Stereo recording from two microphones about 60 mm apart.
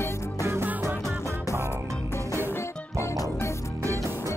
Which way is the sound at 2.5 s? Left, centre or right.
Left.